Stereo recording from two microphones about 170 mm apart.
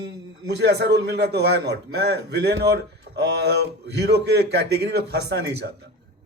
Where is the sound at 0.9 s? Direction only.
75° right (ahead or behind).